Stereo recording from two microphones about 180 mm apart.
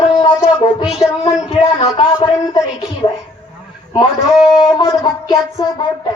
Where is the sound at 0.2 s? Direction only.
25° left (ahead or behind).